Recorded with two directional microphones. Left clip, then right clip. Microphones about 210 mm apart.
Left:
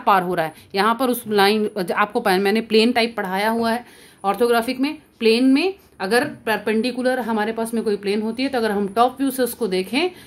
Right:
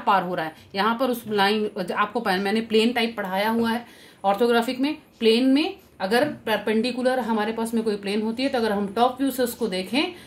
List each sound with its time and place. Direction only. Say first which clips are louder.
0.0 s speech: left 4 dB; 35° left (ahead or behind)